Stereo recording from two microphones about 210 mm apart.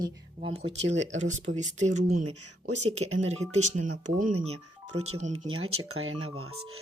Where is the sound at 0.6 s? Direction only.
60° right (ahead or behind).